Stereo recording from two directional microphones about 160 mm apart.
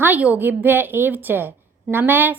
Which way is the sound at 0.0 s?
10° right (ahead or behind).